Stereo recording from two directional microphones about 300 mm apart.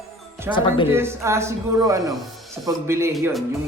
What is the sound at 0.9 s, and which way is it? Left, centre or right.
Speech, centre.